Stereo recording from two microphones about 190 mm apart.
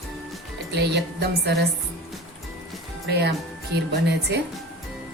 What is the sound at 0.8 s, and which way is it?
Speech, 65° right (ahead or behind).